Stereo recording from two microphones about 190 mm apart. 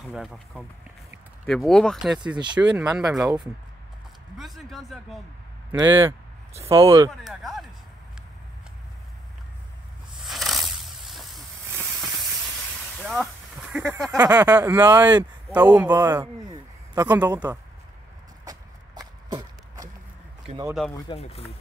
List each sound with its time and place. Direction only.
0.1 s speech: centre (ahead or behind)
2.3 s speech: 25° right (ahead or behind)
2.6 s speech: 5° right (ahead or behind)
4.4 s speech: centre (ahead or behind)
5.7 s speech: 10° right (ahead or behind)
7.1 s speech: centre (ahead or behind)
10.2 s snake: centre (ahead or behind)
13.0 s a sound: centre (ahead or behind)
13.9 s speech: 15° right (ahead or behind)
18.4 s a sound: 20° right (ahead or behind)
21.2 s speech: 35° left (ahead or behind)